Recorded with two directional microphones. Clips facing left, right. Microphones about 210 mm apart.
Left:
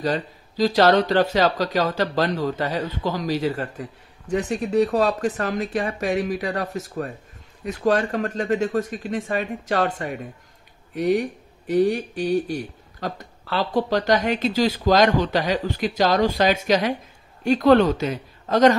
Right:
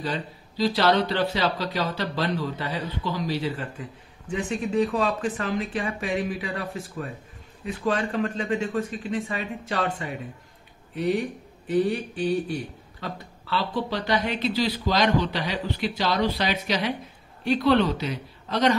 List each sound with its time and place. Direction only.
0.0 s speech: 45° left (ahead or behind)